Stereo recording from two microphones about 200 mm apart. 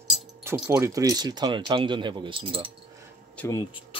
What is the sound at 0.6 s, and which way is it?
Speech, 15° right (ahead or behind).